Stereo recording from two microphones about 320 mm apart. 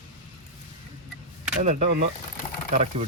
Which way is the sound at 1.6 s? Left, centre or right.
Right.